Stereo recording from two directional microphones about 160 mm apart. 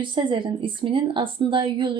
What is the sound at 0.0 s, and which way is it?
A woman's voice, 30° right (ahead or behind).